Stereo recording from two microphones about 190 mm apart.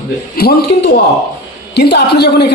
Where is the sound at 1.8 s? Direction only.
60° left (ahead or behind).